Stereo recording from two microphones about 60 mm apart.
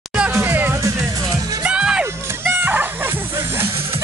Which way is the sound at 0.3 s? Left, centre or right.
Right.